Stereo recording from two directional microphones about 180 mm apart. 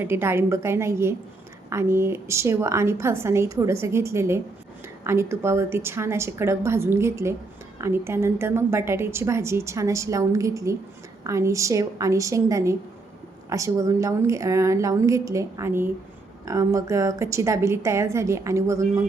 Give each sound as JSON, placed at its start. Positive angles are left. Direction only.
{"t": 0.0, "sound": "a woman's voice", "side_deg": -10}